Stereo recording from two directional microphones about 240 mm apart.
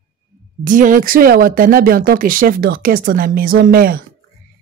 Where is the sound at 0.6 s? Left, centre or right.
Right.